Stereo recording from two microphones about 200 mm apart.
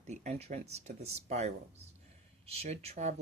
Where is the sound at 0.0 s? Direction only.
35° right (ahead or behind).